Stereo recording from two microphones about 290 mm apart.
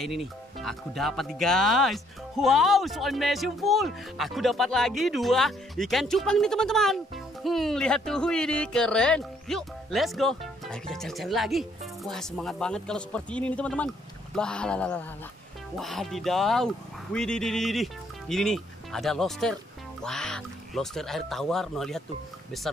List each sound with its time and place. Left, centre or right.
0.0 s speech: centre